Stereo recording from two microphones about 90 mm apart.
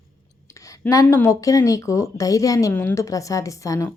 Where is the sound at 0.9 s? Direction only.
35° left (ahead or behind).